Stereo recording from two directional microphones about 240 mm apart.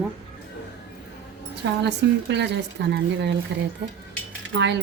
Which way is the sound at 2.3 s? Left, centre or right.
Right.